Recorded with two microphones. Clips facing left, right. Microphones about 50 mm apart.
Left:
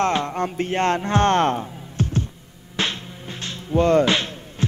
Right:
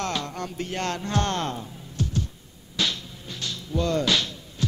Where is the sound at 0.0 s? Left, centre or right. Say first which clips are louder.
Left 8 dB; left.